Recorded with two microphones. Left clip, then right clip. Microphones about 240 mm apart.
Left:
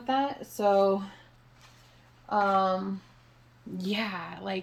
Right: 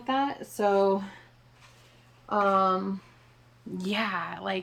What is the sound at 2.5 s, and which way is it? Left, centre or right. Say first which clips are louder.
Speech: right 2 dB; right.